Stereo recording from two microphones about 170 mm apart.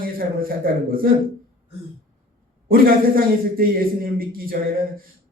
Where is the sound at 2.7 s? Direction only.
60° right (ahead or behind).